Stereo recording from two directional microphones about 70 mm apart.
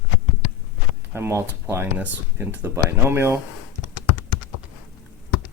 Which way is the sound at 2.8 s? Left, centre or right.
Right.